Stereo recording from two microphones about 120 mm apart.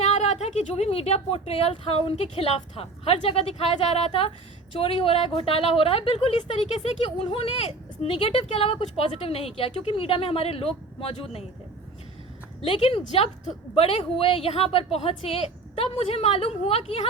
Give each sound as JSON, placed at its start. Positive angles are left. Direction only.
{"t": 0.0, "sound": "a woman's voice", "side_deg": 65}
{"t": 12.6, "sound": "a woman's voice", "side_deg": 50}